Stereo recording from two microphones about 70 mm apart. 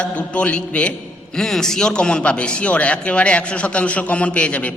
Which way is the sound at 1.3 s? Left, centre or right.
Centre.